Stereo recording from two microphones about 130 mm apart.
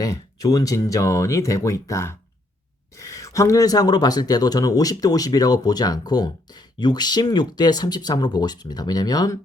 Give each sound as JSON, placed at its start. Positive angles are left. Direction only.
{"t": 0.0, "sound": "speech", "side_deg": 30}